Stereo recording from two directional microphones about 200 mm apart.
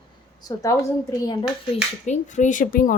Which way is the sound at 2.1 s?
35° left (ahead or behind).